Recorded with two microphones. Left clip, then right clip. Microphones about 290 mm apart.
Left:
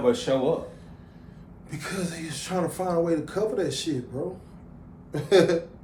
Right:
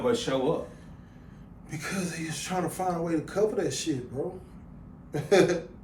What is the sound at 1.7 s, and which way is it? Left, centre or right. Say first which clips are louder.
Speech: left 1 dB; centre.